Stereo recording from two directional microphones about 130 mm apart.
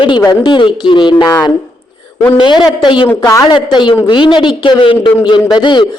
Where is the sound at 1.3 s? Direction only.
25° left (ahead or behind).